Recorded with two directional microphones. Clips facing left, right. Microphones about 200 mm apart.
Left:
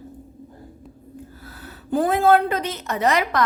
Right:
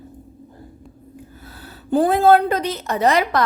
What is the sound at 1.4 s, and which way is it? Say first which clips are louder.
A woman's voice: even; 30° right (ahead or behind).